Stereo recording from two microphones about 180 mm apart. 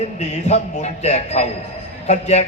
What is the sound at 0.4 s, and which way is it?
A man's voice, 35° left (ahead or behind).